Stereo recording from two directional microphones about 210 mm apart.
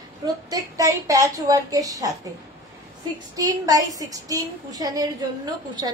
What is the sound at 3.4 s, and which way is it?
A woman's voice, 15° right (ahead or behind).